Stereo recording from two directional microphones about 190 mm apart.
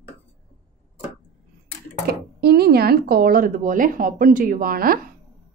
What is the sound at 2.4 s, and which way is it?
Speech, 55° right (ahead or behind).